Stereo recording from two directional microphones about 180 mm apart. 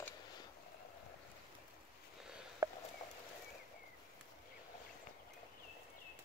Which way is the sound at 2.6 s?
20° right (ahead or behind).